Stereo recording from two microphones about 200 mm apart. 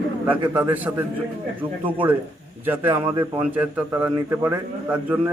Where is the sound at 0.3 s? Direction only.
10° right (ahead or behind).